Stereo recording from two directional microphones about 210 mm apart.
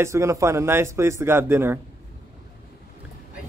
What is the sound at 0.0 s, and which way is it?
A man's voice, 15° right (ahead or behind).